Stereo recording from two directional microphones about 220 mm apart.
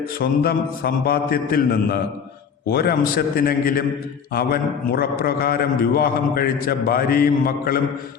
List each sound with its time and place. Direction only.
0.2 s a man's voice: 45° left (ahead or behind)